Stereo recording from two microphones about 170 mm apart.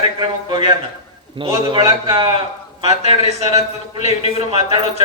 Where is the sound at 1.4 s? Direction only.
30° right (ahead or behind).